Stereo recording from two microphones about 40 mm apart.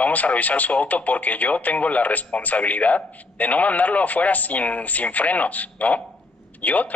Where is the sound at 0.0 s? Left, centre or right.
Left.